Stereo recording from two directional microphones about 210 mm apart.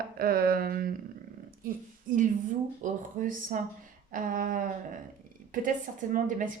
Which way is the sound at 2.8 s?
35° right (ahead or behind).